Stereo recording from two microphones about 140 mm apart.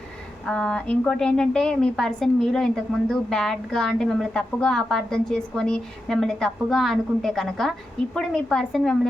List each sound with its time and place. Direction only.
0.4 s a woman's voice: 5° left (ahead or behind)